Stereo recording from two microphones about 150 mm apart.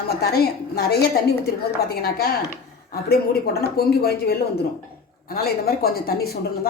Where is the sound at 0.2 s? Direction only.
90° left.